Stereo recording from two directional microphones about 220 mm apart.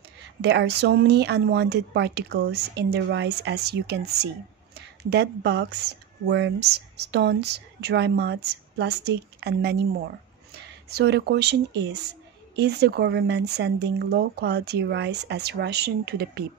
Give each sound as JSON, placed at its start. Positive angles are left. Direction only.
{"t": 0.4, "sound": "speech", "side_deg": -50}